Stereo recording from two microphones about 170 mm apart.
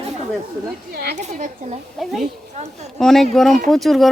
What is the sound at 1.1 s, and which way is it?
Speech, 45° right (ahead or behind).